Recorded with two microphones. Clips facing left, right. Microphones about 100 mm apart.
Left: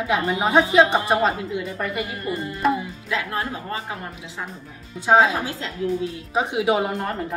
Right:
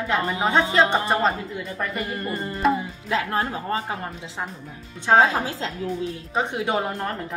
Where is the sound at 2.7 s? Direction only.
30° right (ahead or behind).